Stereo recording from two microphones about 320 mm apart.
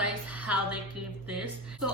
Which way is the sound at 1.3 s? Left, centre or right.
Right.